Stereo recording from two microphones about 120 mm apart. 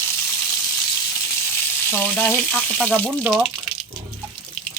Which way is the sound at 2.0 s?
15° left (ahead or behind).